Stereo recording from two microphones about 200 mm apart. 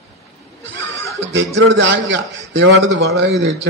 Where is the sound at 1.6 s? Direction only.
65° right (ahead or behind).